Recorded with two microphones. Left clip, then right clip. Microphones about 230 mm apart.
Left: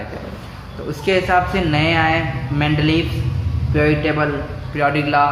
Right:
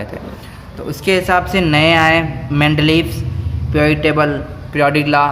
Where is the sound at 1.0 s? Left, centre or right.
Right.